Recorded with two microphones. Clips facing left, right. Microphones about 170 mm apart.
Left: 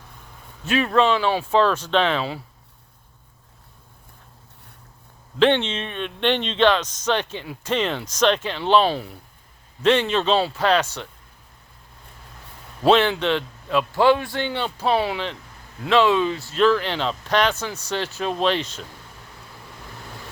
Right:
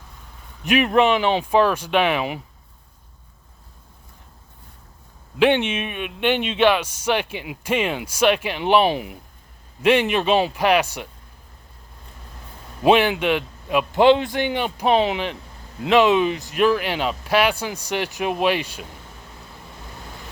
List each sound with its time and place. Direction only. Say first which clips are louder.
0.6 s speech: right 2 dB; 15° right (ahead or behind)
5.4 s speech: right 1 dB; 10° right (ahead or behind)
12.8 s speech: right 1 dB; 15° right (ahead or behind)